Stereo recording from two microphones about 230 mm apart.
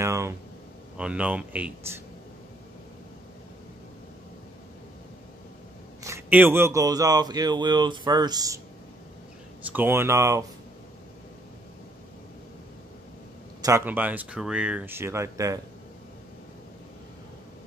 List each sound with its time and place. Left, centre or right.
0.0 s a sound: centre
0.9 s speech: centre
6.0 s speech: centre
9.7 s speech: centre
13.6 s speech: centre